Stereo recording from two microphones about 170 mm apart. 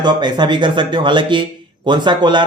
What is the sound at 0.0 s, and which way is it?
Speech, 25° right (ahead or behind).